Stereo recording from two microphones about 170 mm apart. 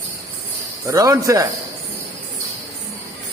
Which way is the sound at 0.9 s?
20° right (ahead or behind).